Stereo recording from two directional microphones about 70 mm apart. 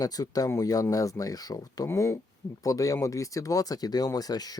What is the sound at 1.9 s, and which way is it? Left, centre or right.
Speech, left.